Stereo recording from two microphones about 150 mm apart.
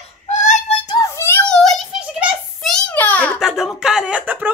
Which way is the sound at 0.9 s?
20° left (ahead or behind).